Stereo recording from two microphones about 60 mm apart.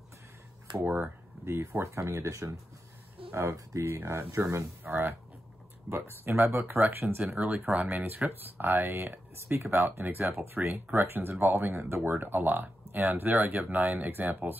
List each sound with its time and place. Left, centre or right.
0.8 s speech: right
1.4 s speech: right
3.8 s speech: right